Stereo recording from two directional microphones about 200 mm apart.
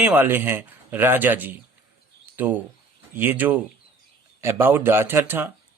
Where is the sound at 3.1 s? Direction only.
10° right (ahead or behind).